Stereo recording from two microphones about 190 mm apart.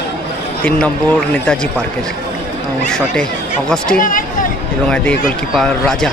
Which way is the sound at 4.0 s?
45° left (ahead or behind).